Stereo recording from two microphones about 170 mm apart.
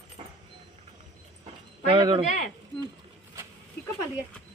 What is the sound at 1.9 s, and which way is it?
Speech, 30° right (ahead or behind).